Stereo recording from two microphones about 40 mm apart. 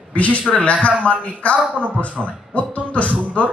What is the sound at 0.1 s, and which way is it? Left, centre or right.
Speech, left.